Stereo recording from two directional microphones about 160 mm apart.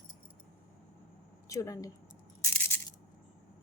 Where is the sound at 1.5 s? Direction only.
20° left (ahead or behind).